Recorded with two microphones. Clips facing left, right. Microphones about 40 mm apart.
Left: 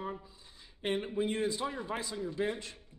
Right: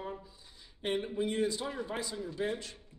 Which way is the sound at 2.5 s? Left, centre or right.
Left.